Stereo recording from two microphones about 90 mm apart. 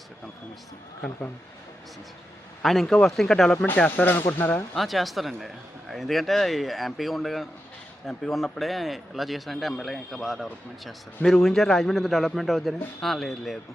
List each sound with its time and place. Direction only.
2.6 s a man's voice: centre (ahead or behind)
3.8 s speech: 20° left (ahead or behind)
4.7 s a man's voice: centre (ahead or behind)